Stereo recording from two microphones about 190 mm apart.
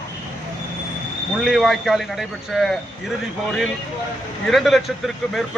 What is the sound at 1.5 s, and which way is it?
Speech, centre (ahead or behind).